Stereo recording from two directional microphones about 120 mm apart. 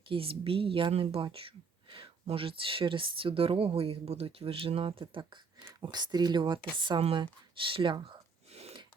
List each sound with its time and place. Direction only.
0.1 s speech: 50° right (ahead or behind)